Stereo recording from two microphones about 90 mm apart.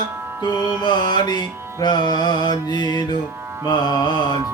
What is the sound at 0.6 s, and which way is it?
Music, 55° left (ahead or behind).